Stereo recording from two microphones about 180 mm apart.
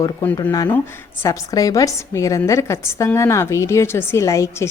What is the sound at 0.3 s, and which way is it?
A woman's voice, 20° left (ahead or behind).